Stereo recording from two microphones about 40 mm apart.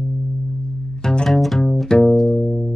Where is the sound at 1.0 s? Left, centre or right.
Centre.